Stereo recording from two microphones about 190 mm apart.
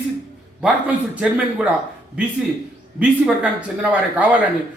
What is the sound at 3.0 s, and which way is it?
A man's voice, 5° right (ahead or behind).